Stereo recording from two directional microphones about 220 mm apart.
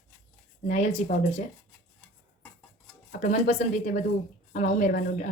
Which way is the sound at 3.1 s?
35° left (ahead or behind).